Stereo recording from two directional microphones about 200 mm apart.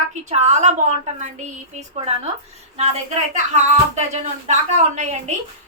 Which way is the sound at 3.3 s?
35° right (ahead or behind).